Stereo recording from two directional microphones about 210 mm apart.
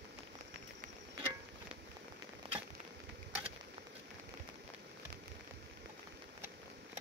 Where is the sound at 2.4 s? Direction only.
25° right (ahead or behind).